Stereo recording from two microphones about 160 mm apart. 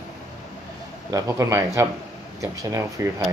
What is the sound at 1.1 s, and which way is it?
Speech, 20° right (ahead or behind).